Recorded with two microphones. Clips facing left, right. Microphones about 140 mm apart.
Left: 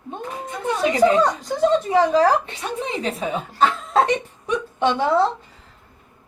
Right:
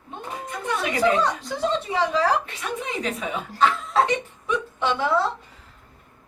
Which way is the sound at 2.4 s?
30° left (ahead or behind).